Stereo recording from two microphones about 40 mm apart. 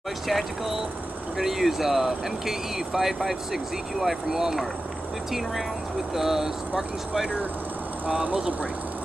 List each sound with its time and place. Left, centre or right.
0.3 s speech: centre
6.1 s speech: centre